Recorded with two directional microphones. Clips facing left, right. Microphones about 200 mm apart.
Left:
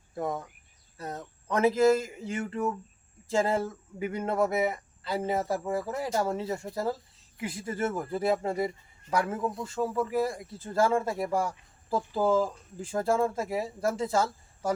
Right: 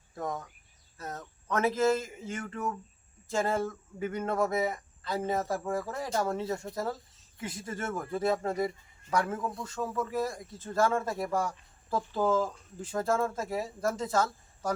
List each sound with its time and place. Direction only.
0.2 s a man's voice: 10° left (ahead or behind)
0.9 s a sound: 10° left (ahead or behind)
2.4 s speech: 20° left (ahead or behind)
3.3 s a man's voice: 10° left (ahead or behind)